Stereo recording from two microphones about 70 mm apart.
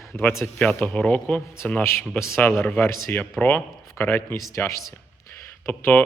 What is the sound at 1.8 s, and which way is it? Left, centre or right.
Speech, left.